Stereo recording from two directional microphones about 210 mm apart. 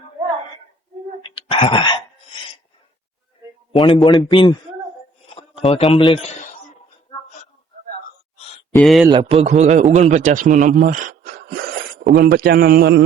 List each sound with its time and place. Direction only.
1.2 s a sound: 25° left (ahead or behind)
3.7 s a man's voice: 25° left (ahead or behind)
5.3 s a sound: 25° left (ahead or behind)
5.9 s a man's voice: 20° left (ahead or behind)
8.8 s speech: centre (ahead or behind)
9.0 s a man's voice: 25° right (ahead or behind); by 13.0 s 45° right (ahead or behind)